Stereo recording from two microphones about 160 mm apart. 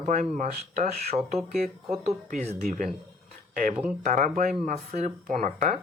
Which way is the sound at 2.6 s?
55° right (ahead or behind).